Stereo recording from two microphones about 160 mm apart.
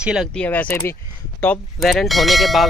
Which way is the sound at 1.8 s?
Centre (ahead or behind).